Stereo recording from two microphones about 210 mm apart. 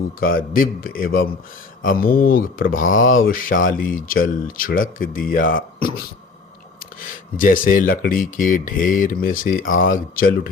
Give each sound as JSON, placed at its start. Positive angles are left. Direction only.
{"t": 0.2, "sound": "speech", "side_deg": 45}